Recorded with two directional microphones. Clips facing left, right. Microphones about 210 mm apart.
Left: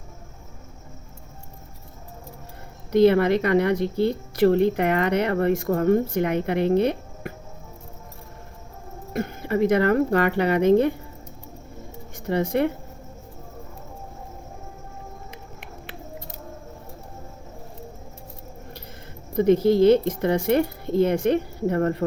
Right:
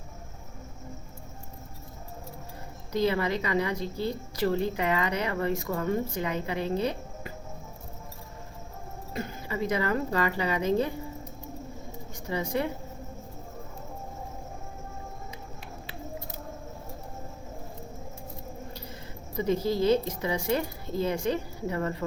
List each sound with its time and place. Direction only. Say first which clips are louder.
2.9 s a woman's voice: left 10 dB; 60° left (ahead or behind)
9.1 s a woman's voice: left 9 dB; 60° left (ahead or behind)
12.3 s a woman's voice: left 7 dB; 60° left (ahead or behind)
19.4 s a woman's voice: left 9 dB; 60° left (ahead or behind)